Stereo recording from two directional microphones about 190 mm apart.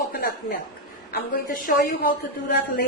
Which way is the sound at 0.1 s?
50° left (ahead or behind).